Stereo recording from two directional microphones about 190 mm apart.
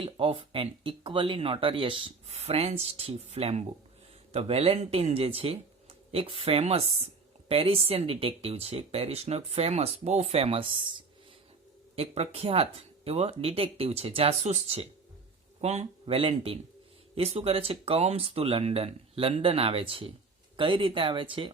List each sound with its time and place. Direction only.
0.0 s speech: 25° right (ahead or behind)
11.9 s speech: 35° right (ahead or behind)